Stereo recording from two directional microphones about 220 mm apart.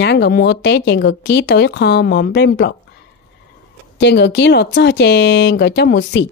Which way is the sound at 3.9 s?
50° left (ahead or behind).